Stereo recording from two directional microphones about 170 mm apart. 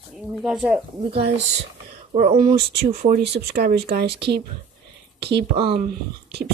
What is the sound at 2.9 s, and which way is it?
Speech, 40° right (ahead or behind).